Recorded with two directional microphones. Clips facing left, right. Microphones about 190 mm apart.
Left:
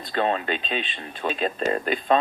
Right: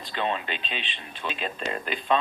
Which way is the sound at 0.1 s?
45° left (ahead or behind).